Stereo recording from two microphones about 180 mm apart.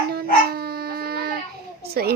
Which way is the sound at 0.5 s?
60° right (ahead or behind).